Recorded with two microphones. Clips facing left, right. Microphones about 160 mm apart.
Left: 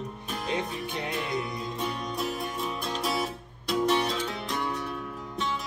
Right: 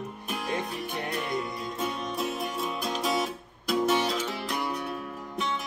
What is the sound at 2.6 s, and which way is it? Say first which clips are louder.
Music: right 2 dB; 5° right (ahead or behind).